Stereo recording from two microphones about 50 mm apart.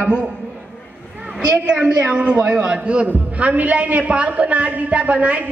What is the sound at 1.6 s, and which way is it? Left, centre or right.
A man's voice, right.